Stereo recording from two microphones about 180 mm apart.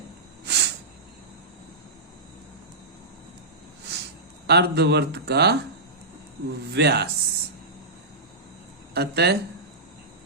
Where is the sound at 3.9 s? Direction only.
70° right (ahead or behind).